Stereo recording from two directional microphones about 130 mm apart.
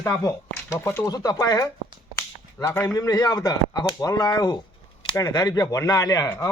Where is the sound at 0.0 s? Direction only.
20° left (ahead or behind).